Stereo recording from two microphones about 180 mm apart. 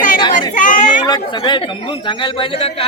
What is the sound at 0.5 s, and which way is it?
Speech, 45° left (ahead or behind).